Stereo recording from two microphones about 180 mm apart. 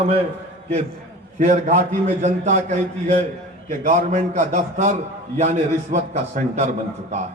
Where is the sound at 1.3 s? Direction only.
40° right (ahead or behind).